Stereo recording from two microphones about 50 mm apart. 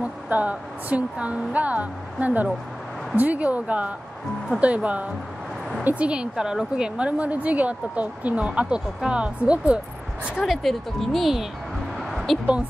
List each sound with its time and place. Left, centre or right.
0.0 s speech: right
6.3 s speech: centre
10.4 s speech: centre
12.0 s a sound: centre